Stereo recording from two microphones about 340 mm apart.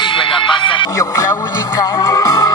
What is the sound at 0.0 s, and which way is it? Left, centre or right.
Music, centre.